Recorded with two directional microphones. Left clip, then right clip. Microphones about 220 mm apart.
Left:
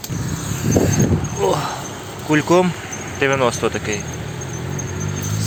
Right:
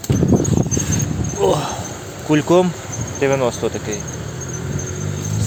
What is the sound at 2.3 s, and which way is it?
Speech, 15° right (ahead or behind).